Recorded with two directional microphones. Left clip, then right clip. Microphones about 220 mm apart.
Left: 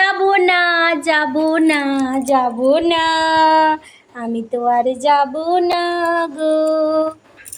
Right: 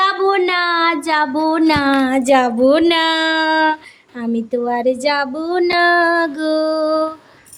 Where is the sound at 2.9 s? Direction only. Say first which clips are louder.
Even; 15° right (ahead or behind).